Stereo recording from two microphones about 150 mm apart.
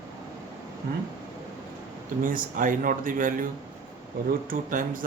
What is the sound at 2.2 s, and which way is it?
Speech, 65° right (ahead or behind).